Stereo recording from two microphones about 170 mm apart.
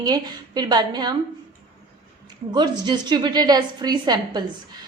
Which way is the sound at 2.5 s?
25° right (ahead or behind).